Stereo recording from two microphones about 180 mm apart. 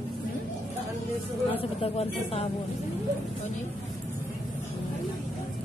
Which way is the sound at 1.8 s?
35° left (ahead or behind).